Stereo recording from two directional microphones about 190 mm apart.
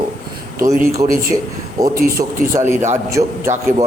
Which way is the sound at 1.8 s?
20° right (ahead or behind).